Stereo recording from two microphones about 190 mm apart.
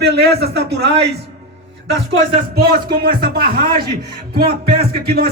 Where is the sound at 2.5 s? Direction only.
55° right (ahead or behind).